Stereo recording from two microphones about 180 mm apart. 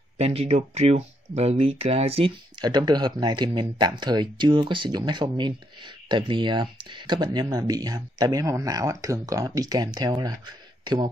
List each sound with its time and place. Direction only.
0.2 s speech: 35° right (ahead or behind)